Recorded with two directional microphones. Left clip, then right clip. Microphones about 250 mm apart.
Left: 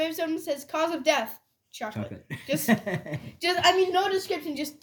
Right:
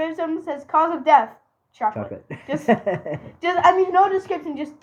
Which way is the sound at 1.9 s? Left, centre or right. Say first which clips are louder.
Right 9 dB; left.